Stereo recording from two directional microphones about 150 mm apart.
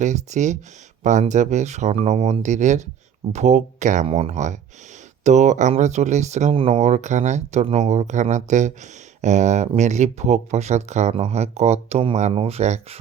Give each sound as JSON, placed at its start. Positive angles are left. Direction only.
{"t": 0.0, "sound": "speech", "side_deg": -50}